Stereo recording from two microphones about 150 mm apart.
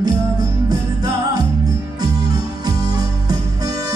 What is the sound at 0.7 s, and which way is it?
Music, 25° right (ahead or behind).